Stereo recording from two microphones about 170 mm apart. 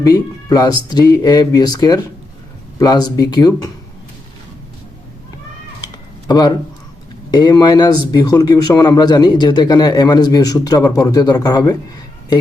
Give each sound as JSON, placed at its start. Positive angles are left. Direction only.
{"t": 0.0, "sound": "speech", "side_deg": 20}
{"t": 5.8, "sound": "typing", "side_deg": 25}
{"t": 7.3, "sound": "speech", "side_deg": 25}